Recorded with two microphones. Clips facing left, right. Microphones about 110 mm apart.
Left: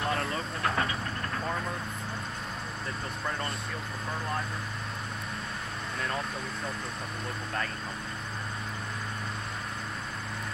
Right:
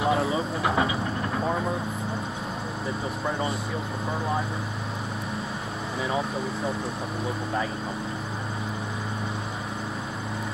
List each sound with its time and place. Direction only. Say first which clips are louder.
0.0 s speech: right 7 dB; 5° right (ahead or behind)
1.3 s vehicle: right 6 dB; 15° right (ahead or behind)
3.3 s speech: right 6 dB; 10° right (ahead or behind)
6.0 s speech: right 7 dB; 5° right (ahead or behind)